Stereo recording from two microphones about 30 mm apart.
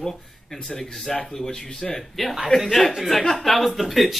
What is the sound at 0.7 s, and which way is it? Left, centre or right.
Speech, centre.